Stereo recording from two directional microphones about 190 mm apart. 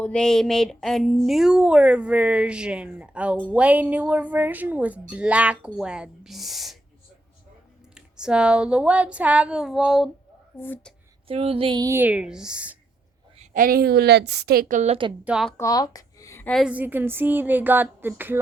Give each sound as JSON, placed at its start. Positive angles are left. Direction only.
{"t": 0.0, "sound": "a woman's voice", "side_deg": 5}
{"t": 7.9, "sound": "speech", "side_deg": -5}
{"t": 10.6, "sound": "speech", "side_deg": 10}
{"t": 11.3, "sound": "a woman's voice", "side_deg": -30}
{"t": 13.4, "sound": "a woman's voice", "side_deg": -45}
{"t": 15.2, "sound": "speech", "side_deg": -5}
{"t": 15.5, "sound": "a sound", "side_deg": 20}
{"t": 16.5, "sound": "a woman's voice", "side_deg": 0}